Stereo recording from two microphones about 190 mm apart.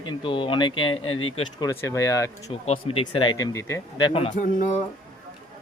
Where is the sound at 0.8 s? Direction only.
90° left.